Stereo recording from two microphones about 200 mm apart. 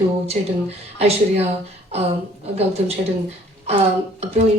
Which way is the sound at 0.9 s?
30° right (ahead or behind).